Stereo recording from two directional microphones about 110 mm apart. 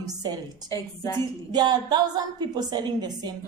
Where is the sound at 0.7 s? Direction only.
30° left (ahead or behind).